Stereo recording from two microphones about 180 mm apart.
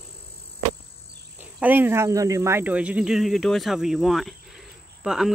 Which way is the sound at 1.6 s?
10° right (ahead or behind).